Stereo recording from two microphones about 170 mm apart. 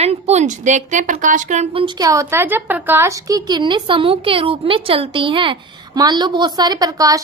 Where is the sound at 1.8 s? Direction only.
25° right (ahead or behind).